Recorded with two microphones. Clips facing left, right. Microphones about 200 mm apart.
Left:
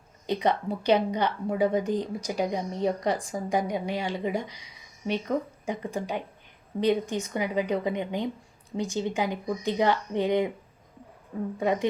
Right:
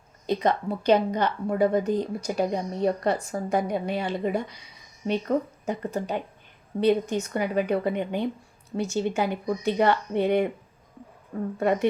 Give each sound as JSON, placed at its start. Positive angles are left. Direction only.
{"t": 0.3, "sound": "speech", "side_deg": 15}